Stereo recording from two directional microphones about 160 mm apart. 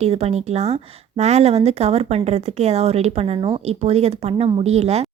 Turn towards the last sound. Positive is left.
turn(degrees=-40)  # may be behind; listen again after turning